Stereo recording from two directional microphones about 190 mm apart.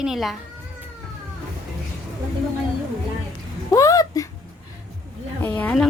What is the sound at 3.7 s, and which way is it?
Music, 15° left (ahead or behind).